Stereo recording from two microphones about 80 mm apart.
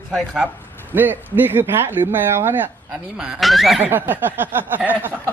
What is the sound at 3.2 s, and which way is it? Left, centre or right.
Speech, centre.